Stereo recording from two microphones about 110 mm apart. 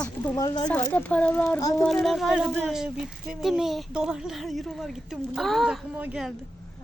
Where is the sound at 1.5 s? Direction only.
30° left (ahead or behind).